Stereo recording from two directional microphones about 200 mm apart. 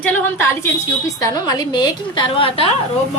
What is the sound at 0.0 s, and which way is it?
A woman's voice, 10° left (ahead or behind).